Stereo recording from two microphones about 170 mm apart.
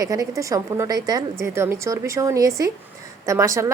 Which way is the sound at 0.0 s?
20° right (ahead or behind).